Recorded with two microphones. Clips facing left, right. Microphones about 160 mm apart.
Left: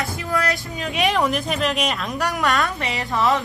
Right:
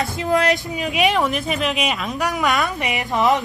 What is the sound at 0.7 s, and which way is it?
A woman's voice, 10° right (ahead or behind).